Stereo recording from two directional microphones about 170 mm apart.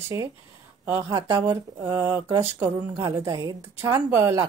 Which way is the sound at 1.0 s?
25° right (ahead or behind).